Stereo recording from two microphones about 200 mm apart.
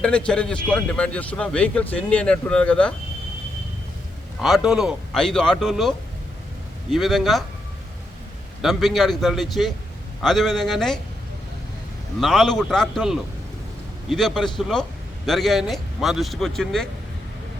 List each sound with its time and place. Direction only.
0.0 s a man's voice: 5° left (ahead or behind)
4.4 s a man's voice: centre (ahead or behind)
6.9 s a man's voice: centre (ahead or behind)
8.6 s a man's voice: centre (ahead or behind)
12.2 s a man's voice: centre (ahead or behind)